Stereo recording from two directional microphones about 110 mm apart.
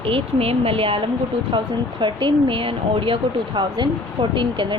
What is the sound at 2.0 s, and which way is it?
A woman's voice, 45° right (ahead or behind).